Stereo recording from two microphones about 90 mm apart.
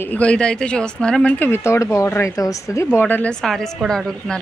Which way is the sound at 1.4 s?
30° left (ahead or behind).